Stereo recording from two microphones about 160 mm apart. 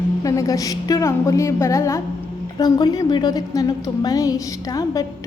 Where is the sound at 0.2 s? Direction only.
20° left (ahead or behind).